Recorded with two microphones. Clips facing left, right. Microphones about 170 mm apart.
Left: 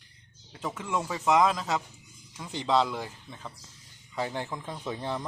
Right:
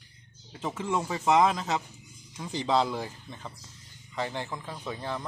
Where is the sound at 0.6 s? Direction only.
30° right (ahead or behind).